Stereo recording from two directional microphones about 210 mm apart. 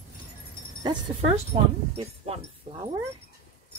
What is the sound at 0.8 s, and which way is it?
Speech, 25° right (ahead or behind).